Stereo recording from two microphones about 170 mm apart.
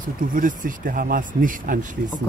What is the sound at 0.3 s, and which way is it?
Speech, 50° right (ahead or behind).